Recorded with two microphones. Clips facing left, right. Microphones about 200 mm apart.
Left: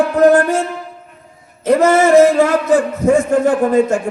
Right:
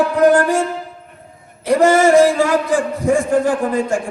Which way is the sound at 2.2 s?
45° left (ahead or behind).